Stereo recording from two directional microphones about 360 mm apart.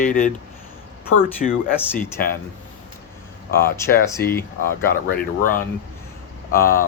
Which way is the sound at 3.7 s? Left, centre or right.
Centre.